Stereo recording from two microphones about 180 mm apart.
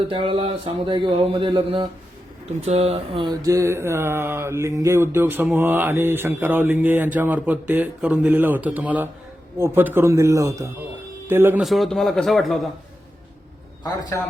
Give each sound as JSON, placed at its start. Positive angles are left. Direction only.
{"t": 0.1, "sound": "speech", "side_deg": -30}
{"t": 11.6, "sound": "a man's voice", "side_deg": 0}
{"t": 13.8, "sound": "a man's voice", "side_deg": 20}